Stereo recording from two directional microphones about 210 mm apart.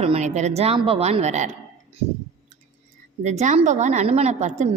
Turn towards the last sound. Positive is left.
turn(degrees=-35)  # may be behind; listen again after turning